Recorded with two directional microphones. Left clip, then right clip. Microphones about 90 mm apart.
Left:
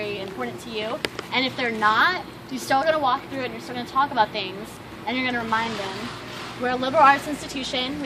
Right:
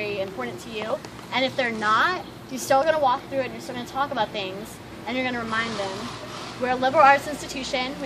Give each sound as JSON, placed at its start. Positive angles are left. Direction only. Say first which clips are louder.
{"t": 0.0, "sound": "a woman's voice", "louder": "right 1 dB", "side_deg": -40}
{"t": 6.6, "sound": "speech", "louder": "even", "side_deg": -35}